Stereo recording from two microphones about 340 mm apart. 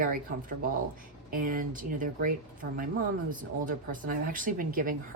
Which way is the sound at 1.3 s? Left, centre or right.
Right.